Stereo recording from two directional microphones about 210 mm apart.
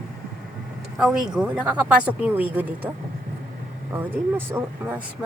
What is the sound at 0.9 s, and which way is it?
Speech, 5° right (ahead or behind).